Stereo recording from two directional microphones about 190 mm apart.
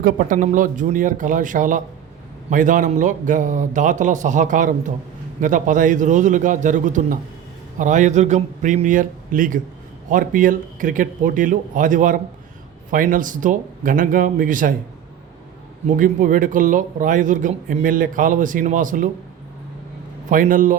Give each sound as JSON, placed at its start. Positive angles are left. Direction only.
{"t": 0.0, "sound": "a man's voice", "side_deg": -40}
{"t": 16.0, "sound": "speech", "side_deg": -45}
{"t": 20.3, "sound": "speech", "side_deg": -45}